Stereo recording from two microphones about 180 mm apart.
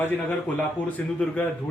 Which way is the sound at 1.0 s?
10° left (ahead or behind).